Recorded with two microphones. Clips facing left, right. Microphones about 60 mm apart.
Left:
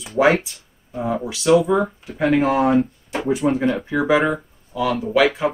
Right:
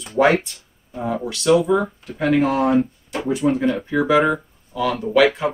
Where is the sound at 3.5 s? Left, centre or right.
Centre.